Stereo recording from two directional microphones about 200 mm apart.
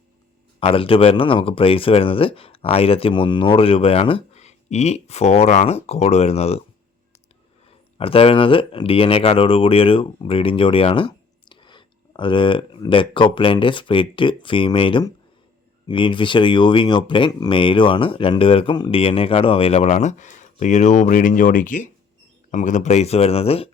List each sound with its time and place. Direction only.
0.6 s speech: 25° left (ahead or behind)
7.9 s speech: 30° left (ahead or behind)